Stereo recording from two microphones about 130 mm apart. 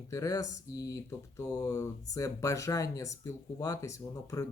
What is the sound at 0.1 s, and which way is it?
Speech, 25° left (ahead or behind).